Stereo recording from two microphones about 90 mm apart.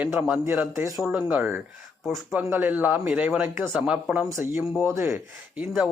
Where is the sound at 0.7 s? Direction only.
30° right (ahead or behind).